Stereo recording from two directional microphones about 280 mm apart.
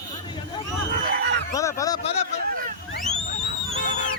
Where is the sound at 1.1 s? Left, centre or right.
Right.